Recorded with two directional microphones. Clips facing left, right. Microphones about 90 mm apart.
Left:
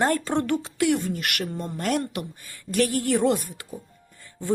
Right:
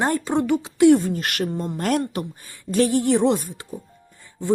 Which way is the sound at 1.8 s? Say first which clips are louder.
Right 3 dB; 40° right (ahead or behind).